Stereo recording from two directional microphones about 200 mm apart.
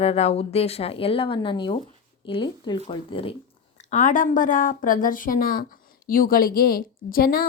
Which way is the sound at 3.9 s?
40° left (ahead or behind).